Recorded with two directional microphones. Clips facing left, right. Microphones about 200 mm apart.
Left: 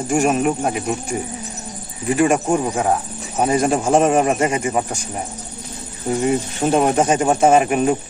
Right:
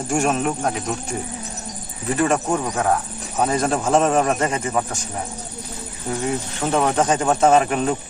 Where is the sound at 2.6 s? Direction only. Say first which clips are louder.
Left 2 dB; 25° left (ahead or behind).